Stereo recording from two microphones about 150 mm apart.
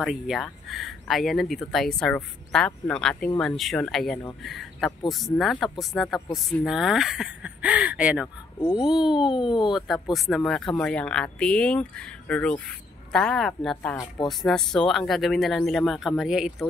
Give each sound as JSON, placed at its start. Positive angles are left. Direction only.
{"t": 0.0, "sound": "speech", "side_deg": -5}
{"t": 8.5, "sound": "a child's voice", "side_deg": 25}
{"t": 8.8, "sound": "speech", "side_deg": -5}